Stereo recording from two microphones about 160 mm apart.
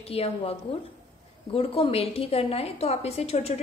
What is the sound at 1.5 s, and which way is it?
A woman's voice, 35° left (ahead or behind).